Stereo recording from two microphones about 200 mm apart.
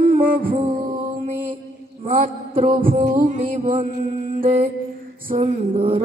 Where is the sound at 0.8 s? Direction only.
45° right (ahead or behind).